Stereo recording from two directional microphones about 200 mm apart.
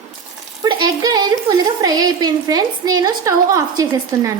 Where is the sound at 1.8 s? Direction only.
20° right (ahead or behind).